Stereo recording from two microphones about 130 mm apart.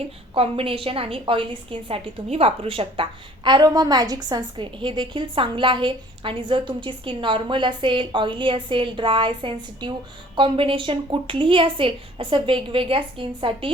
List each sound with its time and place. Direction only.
0.3 s a woman's voice: 45° right (ahead or behind)